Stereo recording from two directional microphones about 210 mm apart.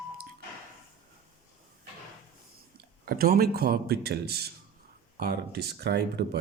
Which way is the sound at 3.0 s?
45° right (ahead or behind).